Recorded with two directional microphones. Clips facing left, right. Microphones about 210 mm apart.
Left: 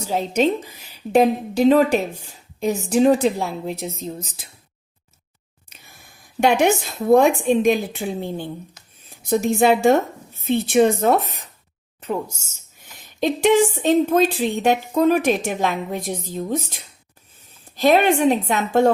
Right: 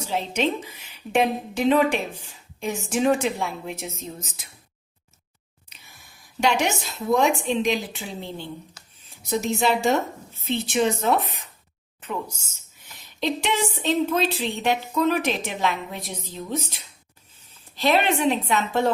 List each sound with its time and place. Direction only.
0.0 s a woman's voice: 40° left (ahead or behind)
6.4 s a woman's voice: 55° left (ahead or behind)